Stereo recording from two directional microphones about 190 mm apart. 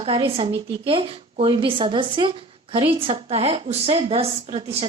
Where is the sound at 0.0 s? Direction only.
30° right (ahead or behind).